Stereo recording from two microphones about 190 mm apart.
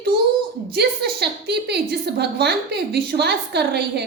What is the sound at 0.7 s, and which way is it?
A woman's voice, 60° right (ahead or behind).